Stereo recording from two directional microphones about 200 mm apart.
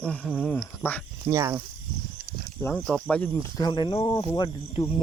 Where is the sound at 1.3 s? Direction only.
15° right (ahead or behind).